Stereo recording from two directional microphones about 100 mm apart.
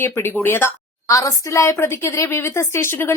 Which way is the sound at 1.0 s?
35° left (ahead or behind).